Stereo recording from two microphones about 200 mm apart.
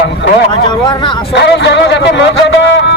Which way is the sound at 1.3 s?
60° left (ahead or behind).